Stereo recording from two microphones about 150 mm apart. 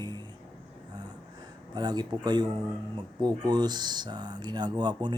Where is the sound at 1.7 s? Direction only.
30° right (ahead or behind).